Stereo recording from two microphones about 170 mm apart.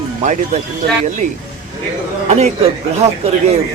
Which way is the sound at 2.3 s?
40° right (ahead or behind).